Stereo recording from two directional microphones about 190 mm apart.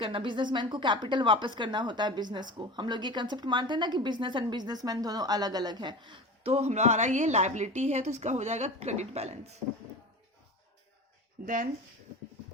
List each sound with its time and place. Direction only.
0.0 s a woman's voice: 25° right (ahead or behind)
11.4 s speech: 45° right (ahead or behind)